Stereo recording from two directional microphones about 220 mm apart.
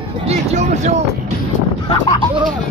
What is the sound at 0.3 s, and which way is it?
Speech, 30° right (ahead or behind).